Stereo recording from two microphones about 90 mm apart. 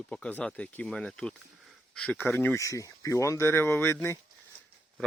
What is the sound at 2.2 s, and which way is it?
Speech, 20° left (ahead or behind).